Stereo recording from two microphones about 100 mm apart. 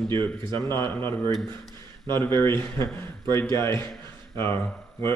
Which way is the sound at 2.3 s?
25° left (ahead or behind).